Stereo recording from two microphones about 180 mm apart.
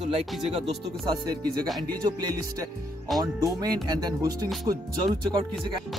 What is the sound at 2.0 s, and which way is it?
Speech, 20° right (ahead or behind).